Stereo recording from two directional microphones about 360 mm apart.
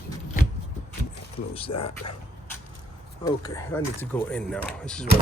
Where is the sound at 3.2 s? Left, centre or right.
Centre.